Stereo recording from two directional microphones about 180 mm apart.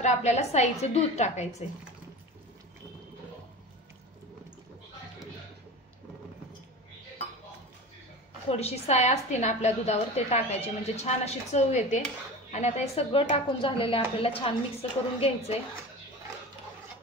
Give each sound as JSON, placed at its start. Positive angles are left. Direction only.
{"t": 0.0, "sound": "a woman's voice", "side_deg": 40}
{"t": 8.5, "sound": "a woman's voice", "side_deg": 35}